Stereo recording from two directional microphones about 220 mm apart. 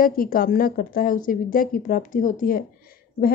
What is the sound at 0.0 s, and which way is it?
A woman's voice, 40° left (ahead or behind).